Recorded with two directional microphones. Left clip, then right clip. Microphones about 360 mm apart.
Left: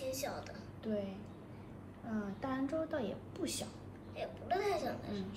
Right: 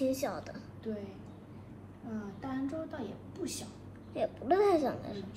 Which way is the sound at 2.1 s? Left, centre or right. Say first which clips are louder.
Even; left.